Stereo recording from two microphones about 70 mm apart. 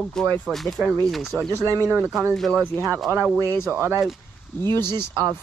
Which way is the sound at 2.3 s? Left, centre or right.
Centre.